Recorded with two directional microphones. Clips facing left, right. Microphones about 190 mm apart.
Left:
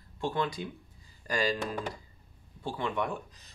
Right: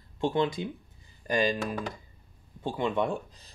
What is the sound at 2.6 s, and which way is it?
Speech, 20° right (ahead or behind).